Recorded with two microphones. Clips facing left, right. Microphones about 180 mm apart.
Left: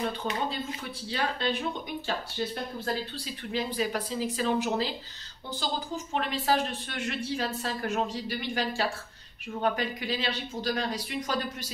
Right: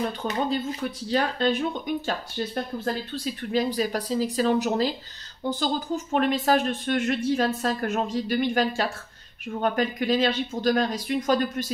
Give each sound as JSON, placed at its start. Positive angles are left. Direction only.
{"t": 0.5, "sound": "a woman's voice", "side_deg": -45}
{"t": 3.5, "sound": "speech", "side_deg": -40}
{"t": 6.1, "sound": "a woman's voice", "side_deg": -50}